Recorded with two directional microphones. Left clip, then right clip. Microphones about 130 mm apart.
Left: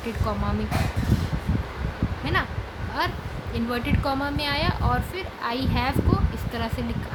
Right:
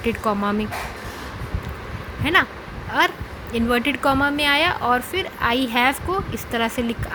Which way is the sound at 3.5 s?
45° right (ahead or behind).